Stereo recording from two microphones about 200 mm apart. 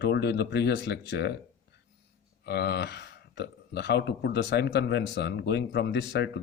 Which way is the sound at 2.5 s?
55° left (ahead or behind).